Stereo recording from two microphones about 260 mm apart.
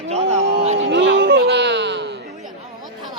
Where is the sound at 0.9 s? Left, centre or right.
Right.